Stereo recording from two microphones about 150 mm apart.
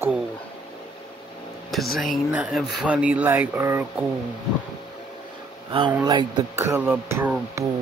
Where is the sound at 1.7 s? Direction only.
Centre (ahead or behind); by 3.8 s 15° right (ahead or behind).